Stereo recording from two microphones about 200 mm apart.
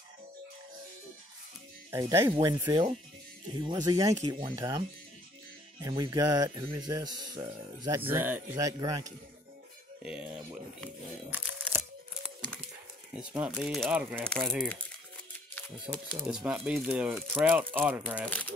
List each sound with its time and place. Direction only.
1.9 s speech: 15° right (ahead or behind)
10.0 s speech: 5° right (ahead or behind)
13.1 s speech: 5° right (ahead or behind)
15.8 s speech: 5° right (ahead or behind)